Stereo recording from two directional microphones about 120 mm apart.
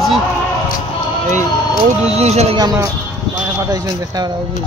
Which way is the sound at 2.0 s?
65° right (ahead or behind).